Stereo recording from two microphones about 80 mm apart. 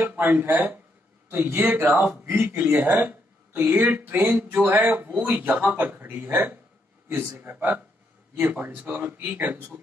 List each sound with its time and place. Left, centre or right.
0.0 s speech: right